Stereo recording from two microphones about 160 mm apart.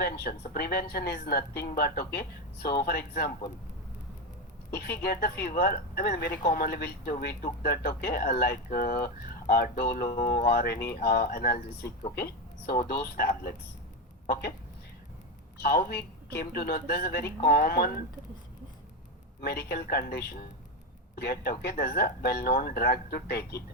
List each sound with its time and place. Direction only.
0.0 s speech: 75° left (ahead or behind)
4.7 s speech: 90° left; by 10.1 s 70° left (ahead or behind)
10.2 s speech: 30° left (ahead or behind)
10.4 s speech: 80° left
12.1 s speech: 90° left
12.9 s speech: 75° left (ahead or behind)
15.6 s speech: 80° left
19.4 s speech: 80° left